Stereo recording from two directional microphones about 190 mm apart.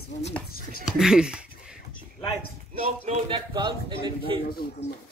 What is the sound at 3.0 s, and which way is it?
Speech, 30° right (ahead or behind).